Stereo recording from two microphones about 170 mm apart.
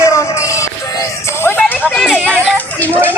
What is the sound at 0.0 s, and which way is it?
Music, 15° left (ahead or behind).